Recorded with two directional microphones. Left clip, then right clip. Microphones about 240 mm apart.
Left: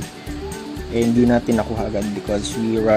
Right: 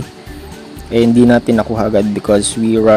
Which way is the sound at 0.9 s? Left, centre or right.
Centre.